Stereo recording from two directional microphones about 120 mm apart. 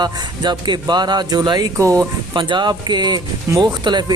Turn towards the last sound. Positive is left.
turn(degrees=-35)  # may be behind; listen again after turning